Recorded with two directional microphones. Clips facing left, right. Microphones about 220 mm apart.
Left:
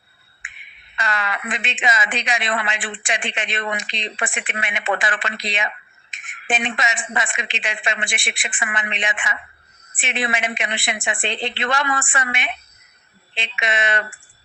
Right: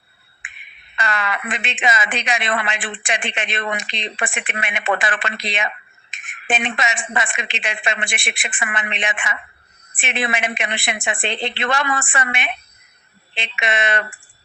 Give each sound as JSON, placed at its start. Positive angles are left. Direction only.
{"t": 0.9, "sound": "speech", "side_deg": -60}